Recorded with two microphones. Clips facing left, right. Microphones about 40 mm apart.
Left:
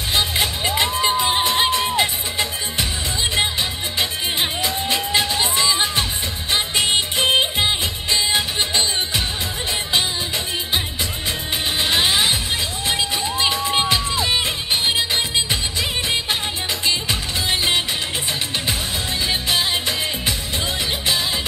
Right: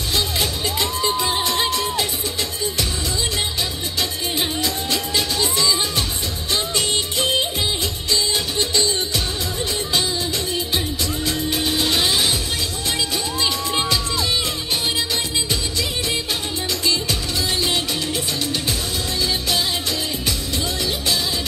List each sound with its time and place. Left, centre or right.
0.1 s music: left
4.9 s music: left
11.2 s music: left
13.4 s music: left
16.8 s music: left